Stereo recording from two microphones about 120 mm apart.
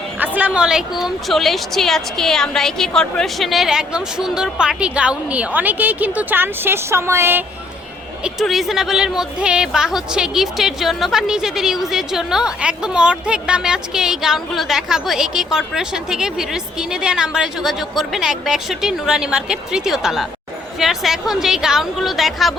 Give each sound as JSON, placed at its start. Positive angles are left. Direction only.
{"t": 0.2, "sound": "speech", "side_deg": -10}
{"t": 8.2, "sound": "speech", "side_deg": 0}